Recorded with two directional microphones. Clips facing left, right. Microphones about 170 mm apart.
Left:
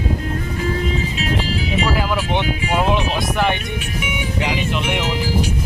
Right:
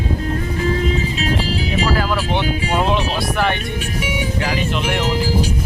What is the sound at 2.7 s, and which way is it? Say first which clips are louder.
Speech: left 1 dB; 15° left (ahead or behind).